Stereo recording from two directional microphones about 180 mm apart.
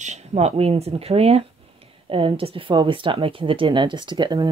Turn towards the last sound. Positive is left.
turn(degrees=-25)  # may be behind; listen again after turning